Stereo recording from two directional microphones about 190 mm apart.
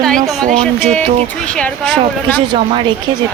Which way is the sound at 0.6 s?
5° left (ahead or behind).